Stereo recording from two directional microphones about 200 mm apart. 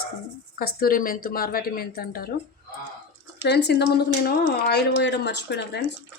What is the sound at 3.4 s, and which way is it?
A woman's voice, 55° left (ahead or behind).